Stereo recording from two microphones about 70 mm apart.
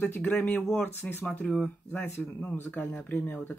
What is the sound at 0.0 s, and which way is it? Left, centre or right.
Speech, left.